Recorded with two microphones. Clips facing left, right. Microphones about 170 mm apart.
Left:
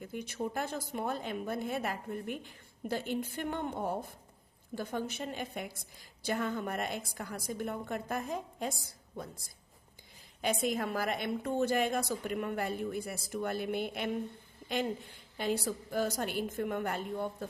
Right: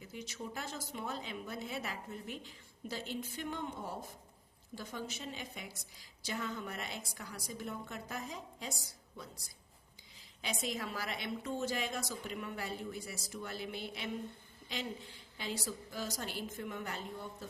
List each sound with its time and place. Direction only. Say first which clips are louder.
0.0 s a woman's voice: left 8 dB; 55° left (ahead or behind)
10.4 s a woman's voice: left 8 dB; 55° left (ahead or behind)